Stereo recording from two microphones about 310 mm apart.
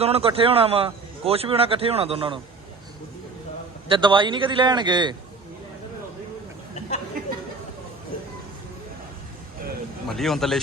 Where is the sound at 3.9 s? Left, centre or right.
Centre.